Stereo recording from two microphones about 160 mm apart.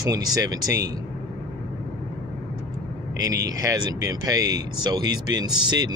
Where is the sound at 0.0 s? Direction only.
25° right (ahead or behind).